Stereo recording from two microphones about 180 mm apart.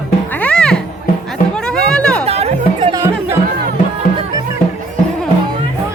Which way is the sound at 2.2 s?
35° right (ahead or behind).